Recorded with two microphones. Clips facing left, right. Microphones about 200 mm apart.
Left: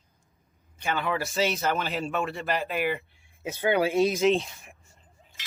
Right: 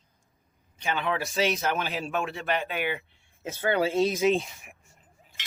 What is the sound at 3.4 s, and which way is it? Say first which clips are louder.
Speech: left 1 dB; 15° left (ahead or behind).